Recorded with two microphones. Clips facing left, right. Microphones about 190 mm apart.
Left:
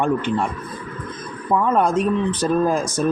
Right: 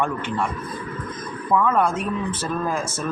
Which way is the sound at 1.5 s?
35° left (ahead or behind).